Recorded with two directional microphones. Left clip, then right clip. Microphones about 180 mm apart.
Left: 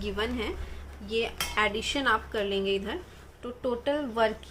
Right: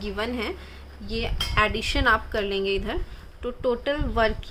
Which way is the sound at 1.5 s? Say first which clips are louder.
Right 5 dB; 35° right (ahead or behind).